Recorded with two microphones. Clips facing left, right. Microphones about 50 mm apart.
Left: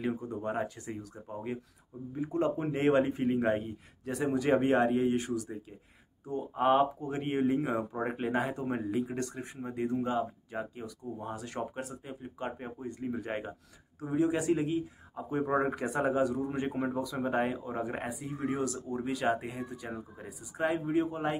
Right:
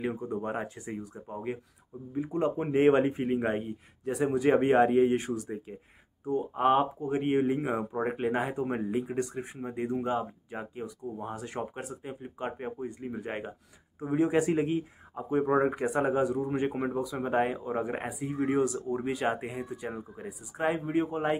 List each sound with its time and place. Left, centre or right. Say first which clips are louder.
0.0 s speech: right 2 dB; centre
2.5 s speech: right 6 dB; centre
4.8 s speech: right 4 dB; right
14.1 s a man's voice: right 3 dB; right
15.4 s speech: right 3 dB; centre